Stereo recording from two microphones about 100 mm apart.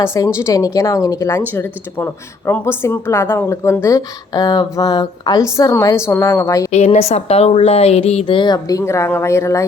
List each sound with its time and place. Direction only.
0.0 s speech: 30° left (ahead or behind)
1.4 s speech: 20° left (ahead or behind)
6.7 s a woman's voice: 90° left
8.4 s speech: 45° left (ahead or behind)